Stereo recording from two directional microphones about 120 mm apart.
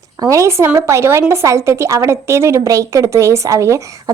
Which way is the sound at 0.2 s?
25° right (ahead or behind).